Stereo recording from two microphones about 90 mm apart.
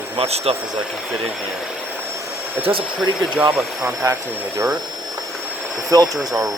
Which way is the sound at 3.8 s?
25° right (ahead or behind).